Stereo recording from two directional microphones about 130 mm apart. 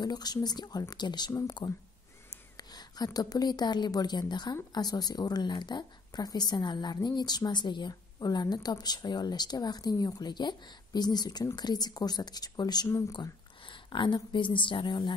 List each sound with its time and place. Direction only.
0.0 s a woman's voice: 30° left (ahead or behind)
2.7 s a woman's voice: 30° left (ahead or behind)